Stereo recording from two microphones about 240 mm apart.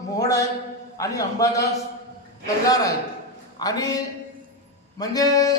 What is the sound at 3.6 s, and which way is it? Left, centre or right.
A man's voice, centre.